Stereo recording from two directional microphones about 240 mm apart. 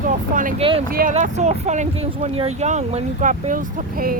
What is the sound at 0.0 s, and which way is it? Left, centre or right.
Speech, right.